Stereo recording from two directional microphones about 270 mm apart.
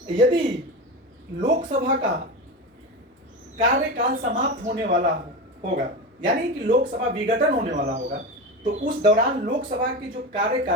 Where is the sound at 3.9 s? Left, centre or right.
Right.